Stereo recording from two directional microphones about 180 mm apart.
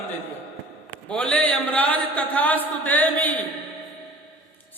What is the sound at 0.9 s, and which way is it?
A man's voice, 5° left (ahead or behind).